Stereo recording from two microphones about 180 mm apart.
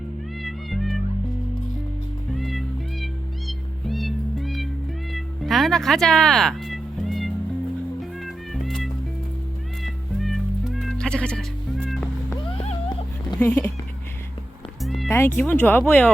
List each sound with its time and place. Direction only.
0.4 s music: centre (ahead or behind)
2.4 s music: centre (ahead or behind)
5.1 s cat: centre (ahead or behind)
8.2 s music: centre (ahead or behind)
12.5 s a sound: 30° left (ahead or behind)
13.4 s speech: 10° left (ahead or behind)
14.8 s cat: centre (ahead or behind)
15.1 s speech: 15° left (ahead or behind)